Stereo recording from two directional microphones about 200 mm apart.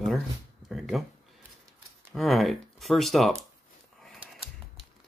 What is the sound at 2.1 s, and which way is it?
Speech, centre (ahead or behind).